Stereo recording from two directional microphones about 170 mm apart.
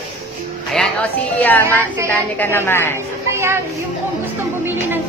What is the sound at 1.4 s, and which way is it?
A woman's voice, 10° left (ahead or behind).